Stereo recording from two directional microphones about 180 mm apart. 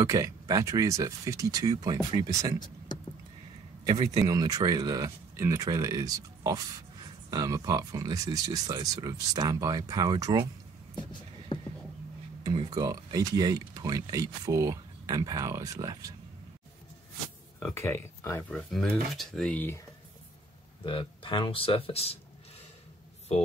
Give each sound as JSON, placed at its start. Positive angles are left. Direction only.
{"t": 0.0, "sound": "speech", "side_deg": -20}
{"t": 3.8, "sound": "speech", "side_deg": -25}
{"t": 12.4, "sound": "speech", "side_deg": -20}
{"t": 17.7, "sound": "speech", "side_deg": 15}
{"t": 18.7, "sound": "speech", "side_deg": 0}
{"t": 20.8, "sound": "speech", "side_deg": 30}